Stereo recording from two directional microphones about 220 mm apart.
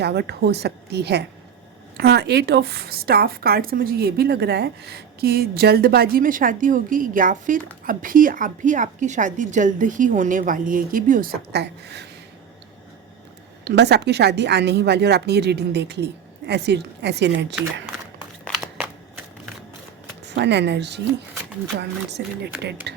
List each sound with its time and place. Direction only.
0.0 s a woman's voice: 50° right (ahead or behind)
13.7 s a woman's voice: 50° right (ahead or behind)
18.4 s a sound: centre (ahead or behind)
20.2 s a woman's voice: 50° right (ahead or behind)
22.2 s a woman's voice: 50° right (ahead or behind)